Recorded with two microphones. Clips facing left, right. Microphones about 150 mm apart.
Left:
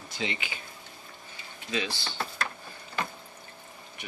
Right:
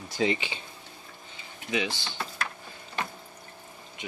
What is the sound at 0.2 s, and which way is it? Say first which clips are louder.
Speech: right 7 dB; 35° right (ahead or behind).